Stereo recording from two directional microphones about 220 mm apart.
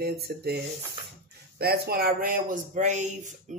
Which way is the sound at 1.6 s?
45° right (ahead or behind).